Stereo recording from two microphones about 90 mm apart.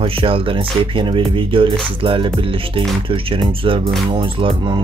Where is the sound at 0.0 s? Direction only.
85° right.